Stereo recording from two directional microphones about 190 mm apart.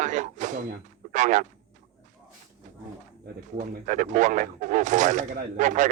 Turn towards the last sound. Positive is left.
turn(degrees=-40)  # may be behind; listen again after turning